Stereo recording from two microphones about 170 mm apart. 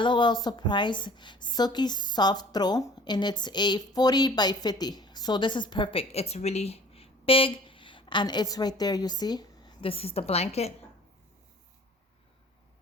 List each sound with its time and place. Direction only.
0.0 s a woman's voice: 25° left (ahead or behind)